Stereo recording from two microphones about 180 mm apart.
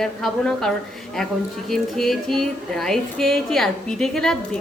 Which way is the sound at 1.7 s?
Centre (ahead or behind).